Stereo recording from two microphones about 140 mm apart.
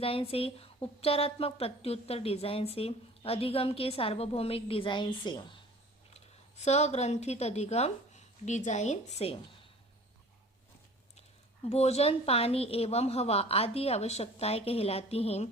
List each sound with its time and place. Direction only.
0.0 s a woman's voice: 40° left (ahead or behind)
6.1 s a woman's voice: 55° left (ahead or behind)
11.7 s a woman's voice: 50° left (ahead or behind)